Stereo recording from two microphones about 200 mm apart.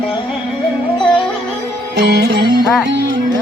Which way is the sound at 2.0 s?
55° right (ahead or behind).